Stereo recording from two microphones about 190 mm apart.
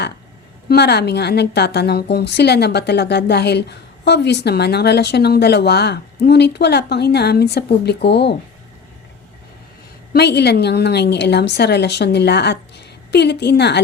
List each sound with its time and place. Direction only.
0.7 s a woman's voice: 60° left (ahead or behind)
10.1 s a woman's voice: 60° left (ahead or behind)